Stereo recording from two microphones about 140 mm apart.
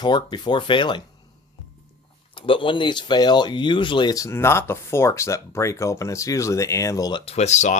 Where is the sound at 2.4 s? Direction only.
40° left (ahead or behind).